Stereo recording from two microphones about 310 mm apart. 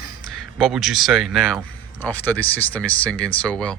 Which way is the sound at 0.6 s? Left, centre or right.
Centre.